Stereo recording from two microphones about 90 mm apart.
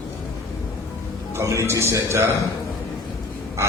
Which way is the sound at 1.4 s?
35° right (ahead or behind).